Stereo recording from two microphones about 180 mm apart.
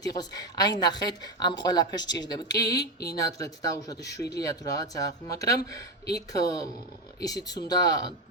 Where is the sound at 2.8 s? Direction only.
60° left (ahead or behind).